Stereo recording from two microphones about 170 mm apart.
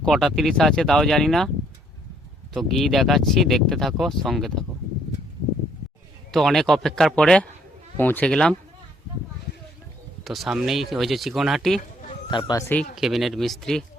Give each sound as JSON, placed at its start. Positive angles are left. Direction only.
{"t": 0.0, "sound": "speech", "side_deg": 0}
{"t": 2.5, "sound": "speech", "side_deg": 0}
{"t": 6.3, "sound": "speech", "side_deg": 0}
{"t": 10.2, "sound": "speech", "side_deg": 0}
{"t": 12.3, "sound": "speech", "side_deg": 25}
{"t": 13.0, "sound": "speech", "side_deg": 0}